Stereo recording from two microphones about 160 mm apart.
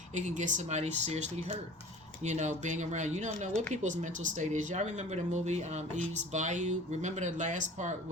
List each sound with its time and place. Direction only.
0.1 s speech: 50° right (ahead or behind)